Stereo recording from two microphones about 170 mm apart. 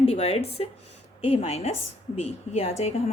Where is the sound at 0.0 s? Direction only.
35° left (ahead or behind).